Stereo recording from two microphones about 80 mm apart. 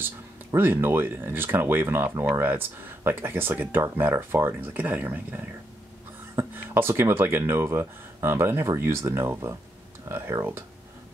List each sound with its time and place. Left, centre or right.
0.6 s speech: right